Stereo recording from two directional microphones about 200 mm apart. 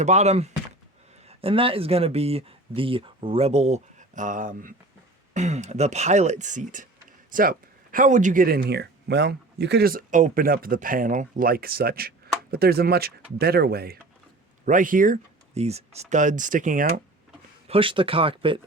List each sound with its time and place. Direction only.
0.0 s speech: 35° right (ahead or behind)
17.7 s speech: 25° right (ahead or behind)